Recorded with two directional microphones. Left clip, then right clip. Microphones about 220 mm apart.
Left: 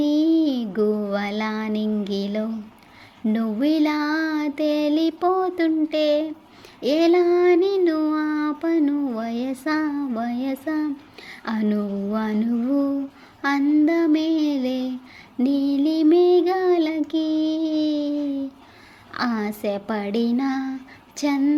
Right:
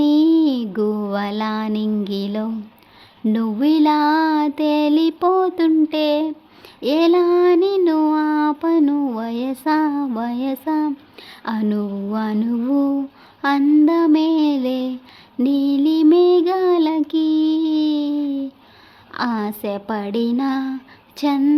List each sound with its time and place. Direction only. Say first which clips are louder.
0.0 s music: right 4 dB; 10° right (ahead or behind)
3.2 s child singing: right 4 dB; 10° right (ahead or behind)
13.4 s a sound: right 4 dB; 5° right (ahead or behind)
15.4 s child singing: right 3 dB; 5° right (ahead or behind)
19.1 s speech: right 3 dB; 5° right (ahead or behind)
21.2 s a sound: right 3 dB; 10° right (ahead or behind)